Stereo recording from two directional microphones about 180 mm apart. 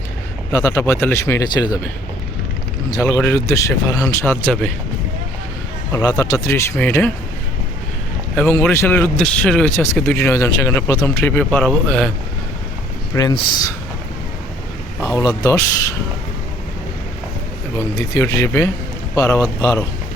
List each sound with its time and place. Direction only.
0.5 s a man's voice: 15° left (ahead or behind)
2.9 s a man's voice: 15° left (ahead or behind)
5.9 s a man's voice: 20° left (ahead or behind)
8.4 s a man's voice: 10° left (ahead or behind)
13.1 s speech: 20° left (ahead or behind)
15.0 s speech: 20° left (ahead or behind)
17.7 s a man's voice: 15° left (ahead or behind)